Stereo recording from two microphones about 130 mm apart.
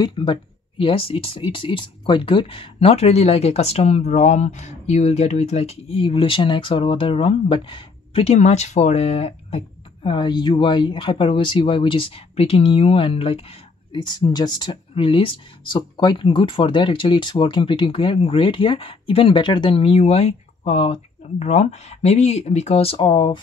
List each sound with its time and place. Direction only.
0.0 s speech: 35° left (ahead or behind); by 9.6 s 50° left (ahead or behind)
10.0 s speech: 35° left (ahead or behind)
14.0 s speech: 35° left (ahead or behind)